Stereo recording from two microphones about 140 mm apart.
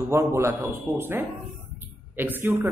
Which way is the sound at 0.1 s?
20° right (ahead or behind).